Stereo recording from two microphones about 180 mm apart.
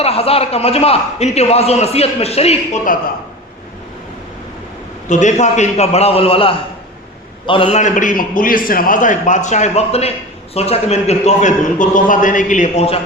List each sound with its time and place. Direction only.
0.0 s a man's voice: 35° left (ahead or behind)
5.0 s a man's voice: 40° left (ahead or behind)